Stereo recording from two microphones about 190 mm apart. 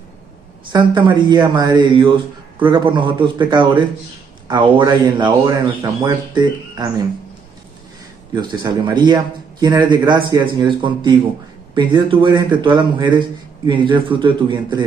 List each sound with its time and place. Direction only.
0.7 s speech: 25° right (ahead or behind)
8.4 s speech: 25° right (ahead or behind)